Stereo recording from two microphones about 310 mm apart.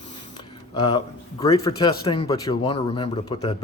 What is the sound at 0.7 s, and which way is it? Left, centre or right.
Speech, centre.